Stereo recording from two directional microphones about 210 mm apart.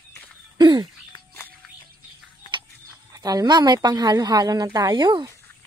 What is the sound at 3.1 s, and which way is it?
A woman's voice, 15° right (ahead or behind).